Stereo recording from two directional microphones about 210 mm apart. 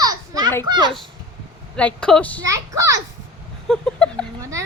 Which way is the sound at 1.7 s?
5° left (ahead or behind).